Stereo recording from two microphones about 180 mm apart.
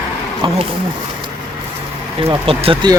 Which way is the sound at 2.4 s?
30° right (ahead or behind).